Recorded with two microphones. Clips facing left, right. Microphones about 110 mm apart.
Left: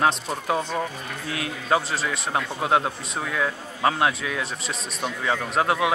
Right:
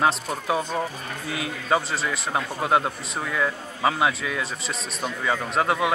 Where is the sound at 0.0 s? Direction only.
5° right (ahead or behind).